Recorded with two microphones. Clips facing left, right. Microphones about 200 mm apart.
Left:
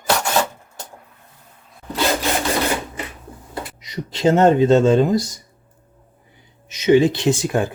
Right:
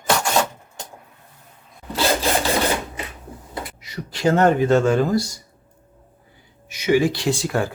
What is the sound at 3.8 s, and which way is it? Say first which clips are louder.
Speech: left 3 dB; 20° left (ahead or behind).